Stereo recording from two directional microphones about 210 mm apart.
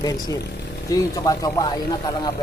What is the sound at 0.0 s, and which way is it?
Speech, 15° left (ahead or behind).